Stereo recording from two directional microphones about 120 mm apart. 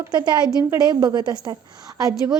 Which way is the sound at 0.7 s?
35° right (ahead or behind).